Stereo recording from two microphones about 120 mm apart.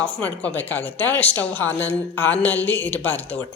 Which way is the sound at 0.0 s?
15° left (ahead or behind).